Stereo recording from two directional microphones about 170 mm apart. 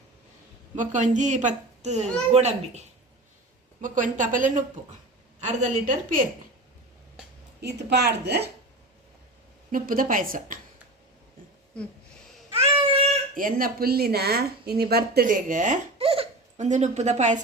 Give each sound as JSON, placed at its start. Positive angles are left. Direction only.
{"t": 0.8, "sound": "a woman's voice", "side_deg": -45}
{"t": 3.8, "sound": "a woman's voice", "side_deg": -50}
{"t": 7.6, "sound": "a woman's voice", "side_deg": -80}
{"t": 9.7, "sound": "speech", "side_deg": -55}
{"t": 12.5, "sound": "babbling", "side_deg": -35}
{"t": 13.3, "sound": "speech", "side_deg": -55}
{"t": 16.0, "sound": "baby laughter", "side_deg": -35}